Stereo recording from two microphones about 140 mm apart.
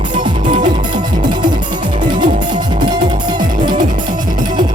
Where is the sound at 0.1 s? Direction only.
35° right (ahead or behind).